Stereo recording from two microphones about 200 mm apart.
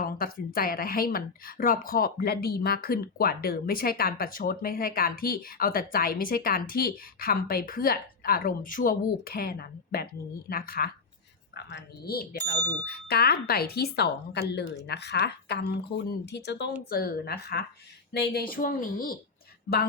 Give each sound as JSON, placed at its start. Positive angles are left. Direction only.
{"t": 0.0, "sound": "speech", "side_deg": 45}